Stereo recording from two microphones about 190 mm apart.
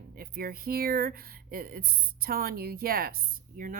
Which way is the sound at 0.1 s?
50° right (ahead or behind).